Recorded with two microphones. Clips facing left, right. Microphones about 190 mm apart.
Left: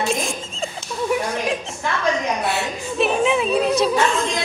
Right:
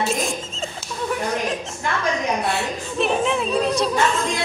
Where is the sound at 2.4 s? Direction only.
5° left (ahead or behind).